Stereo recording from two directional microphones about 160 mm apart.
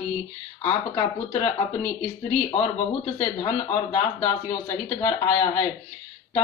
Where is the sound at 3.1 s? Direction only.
30° left (ahead or behind).